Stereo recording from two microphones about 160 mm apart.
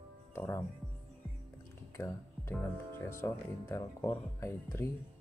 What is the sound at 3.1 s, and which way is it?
Speech, 15° left (ahead or behind).